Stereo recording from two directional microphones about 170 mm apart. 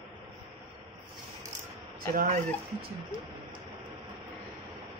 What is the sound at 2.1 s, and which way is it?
Speech, 60° right (ahead or behind).